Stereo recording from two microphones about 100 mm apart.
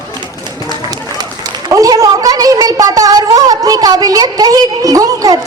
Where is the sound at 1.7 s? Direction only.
35° right (ahead or behind).